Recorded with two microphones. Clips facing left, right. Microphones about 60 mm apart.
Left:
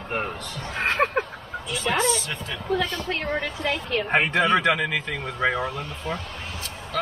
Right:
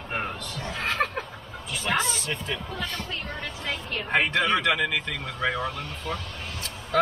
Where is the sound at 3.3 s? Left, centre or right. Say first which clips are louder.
Left 7 dB; left.